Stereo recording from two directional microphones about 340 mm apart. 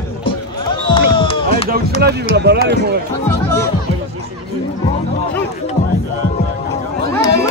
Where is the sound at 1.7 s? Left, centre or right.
Right.